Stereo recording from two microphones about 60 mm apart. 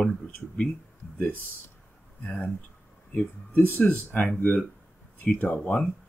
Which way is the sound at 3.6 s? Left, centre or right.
Left.